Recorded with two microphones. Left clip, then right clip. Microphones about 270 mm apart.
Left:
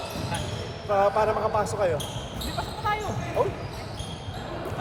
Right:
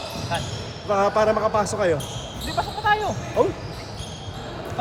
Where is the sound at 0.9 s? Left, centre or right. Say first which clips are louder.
Right 3 dB; right.